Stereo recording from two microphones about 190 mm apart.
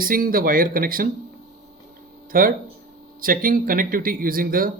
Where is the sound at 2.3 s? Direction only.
50° right (ahead or behind).